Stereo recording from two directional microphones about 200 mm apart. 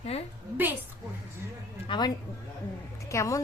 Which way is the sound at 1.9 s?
25° left (ahead or behind).